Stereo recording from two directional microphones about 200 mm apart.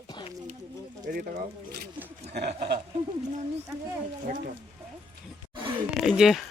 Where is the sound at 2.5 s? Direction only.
30° right (ahead or behind).